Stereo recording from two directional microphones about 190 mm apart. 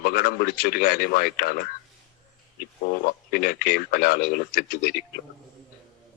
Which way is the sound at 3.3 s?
55° left (ahead or behind).